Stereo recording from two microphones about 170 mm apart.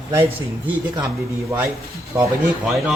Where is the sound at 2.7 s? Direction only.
Centre (ahead or behind).